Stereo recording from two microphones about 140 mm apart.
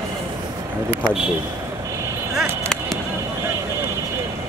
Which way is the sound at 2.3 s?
5° right (ahead or behind).